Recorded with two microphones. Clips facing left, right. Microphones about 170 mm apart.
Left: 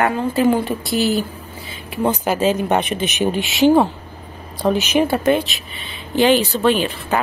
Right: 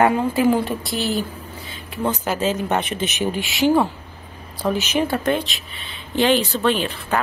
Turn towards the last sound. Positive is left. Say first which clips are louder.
# left 3 dB
turn(degrees=5)  # may be behind; listen again after turning